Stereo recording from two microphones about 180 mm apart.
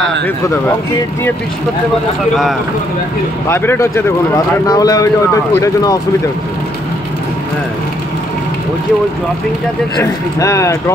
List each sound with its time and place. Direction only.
3.4 s speech: 10° left (ahead or behind)
9.9 s speech: 15° left (ahead or behind)